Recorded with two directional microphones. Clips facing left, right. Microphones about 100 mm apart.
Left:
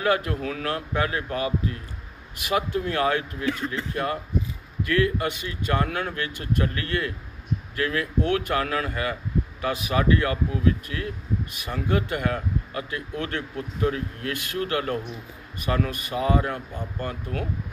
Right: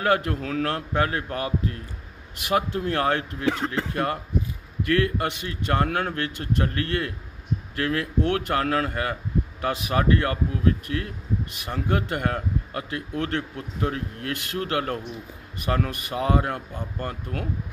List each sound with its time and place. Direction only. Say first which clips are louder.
0.0 s a man's voice: right 1 dB; 50° right (ahead or behind); by 4.0 s 80° right
4.9 s a man's voice: left 1 dB; 55° right (ahead or behind)